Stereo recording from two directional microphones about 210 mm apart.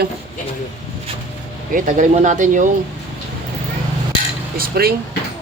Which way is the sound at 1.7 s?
35° right (ahead or behind).